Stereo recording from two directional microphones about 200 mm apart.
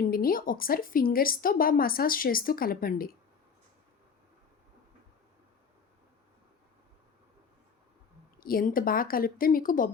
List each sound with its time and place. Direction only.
0.1 s a woman's voice: 45° left (ahead or behind)
8.4 s a woman's voice: 45° left (ahead or behind)